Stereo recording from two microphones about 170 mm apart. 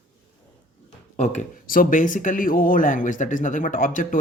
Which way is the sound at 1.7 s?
55° left (ahead or behind).